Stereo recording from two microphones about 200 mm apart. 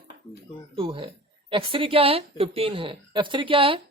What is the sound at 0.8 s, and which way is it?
A woman's voice, 25° right (ahead or behind).